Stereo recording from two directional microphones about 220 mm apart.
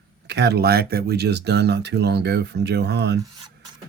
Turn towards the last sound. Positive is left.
turn(degrees=-50)  # may be behind; listen again after turning